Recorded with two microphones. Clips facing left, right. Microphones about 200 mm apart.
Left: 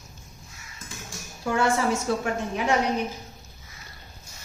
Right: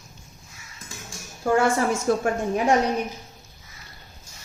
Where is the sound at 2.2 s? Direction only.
45° right (ahead or behind).